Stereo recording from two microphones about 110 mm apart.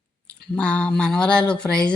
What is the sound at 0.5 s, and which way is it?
Speech, 10° left (ahead or behind).